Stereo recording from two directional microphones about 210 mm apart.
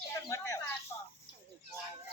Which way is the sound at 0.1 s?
15° left (ahead or behind).